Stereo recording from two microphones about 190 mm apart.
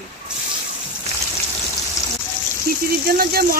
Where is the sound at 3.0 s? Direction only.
50° right (ahead or behind).